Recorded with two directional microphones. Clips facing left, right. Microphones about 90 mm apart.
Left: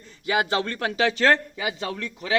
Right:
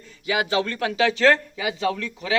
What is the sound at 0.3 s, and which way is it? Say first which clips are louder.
Speech: right 1 dB; 35° left (ahead or behind).